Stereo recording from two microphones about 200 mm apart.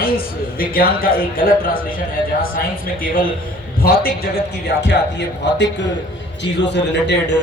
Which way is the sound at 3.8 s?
50° left (ahead or behind).